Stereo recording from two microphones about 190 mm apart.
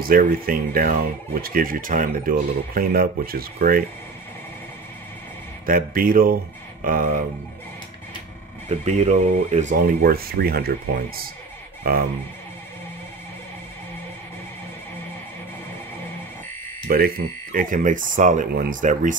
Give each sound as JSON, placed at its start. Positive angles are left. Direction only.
{"t": 0.0, "sound": "speech", "side_deg": -50}
{"t": 5.7, "sound": "speech", "side_deg": -50}
{"t": 8.6, "sound": "speech", "side_deg": -35}
{"t": 11.8, "sound": "speech", "side_deg": -50}
{"t": 16.8, "sound": "speech", "side_deg": -50}